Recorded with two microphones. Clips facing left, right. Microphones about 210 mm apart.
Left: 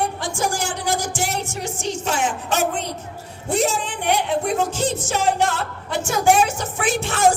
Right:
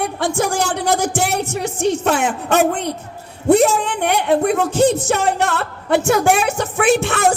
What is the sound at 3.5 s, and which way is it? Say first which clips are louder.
Music: right 8 dB; 60° right (ahead or behind).